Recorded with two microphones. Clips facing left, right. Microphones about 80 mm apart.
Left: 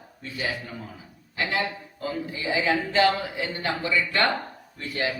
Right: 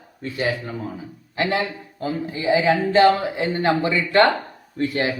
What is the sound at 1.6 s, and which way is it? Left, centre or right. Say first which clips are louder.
A man's voice: right 3 dB; right.